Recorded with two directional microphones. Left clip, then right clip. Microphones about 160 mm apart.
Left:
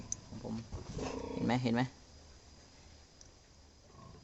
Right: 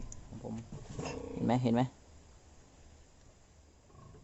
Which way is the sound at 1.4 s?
25° right (ahead or behind).